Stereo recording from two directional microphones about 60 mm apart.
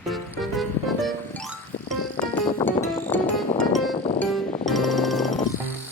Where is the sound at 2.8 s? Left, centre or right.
Left.